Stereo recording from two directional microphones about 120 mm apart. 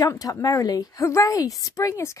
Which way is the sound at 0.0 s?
30° left (ahead or behind).